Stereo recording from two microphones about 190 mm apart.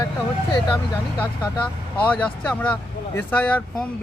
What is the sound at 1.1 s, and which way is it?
Speech, 10° left (ahead or behind).